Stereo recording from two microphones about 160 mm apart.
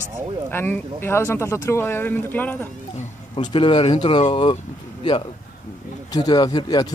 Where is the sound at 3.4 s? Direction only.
30° left (ahead or behind).